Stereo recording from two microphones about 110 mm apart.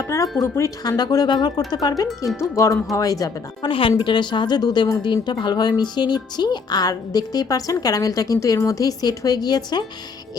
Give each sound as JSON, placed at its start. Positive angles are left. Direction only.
{"t": 0.4, "sound": "speech", "side_deg": 25}
{"t": 2.0, "sound": "speech", "side_deg": 0}
{"t": 2.4, "sound": "speech", "side_deg": 25}
{"t": 3.7, "sound": "speech", "side_deg": 50}